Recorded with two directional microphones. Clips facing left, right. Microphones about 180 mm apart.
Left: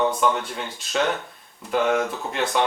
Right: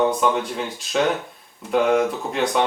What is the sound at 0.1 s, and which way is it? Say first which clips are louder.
Speech: right 2 dB; centre (ahead or behind).